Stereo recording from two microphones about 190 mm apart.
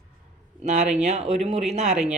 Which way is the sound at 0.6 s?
40° right (ahead or behind).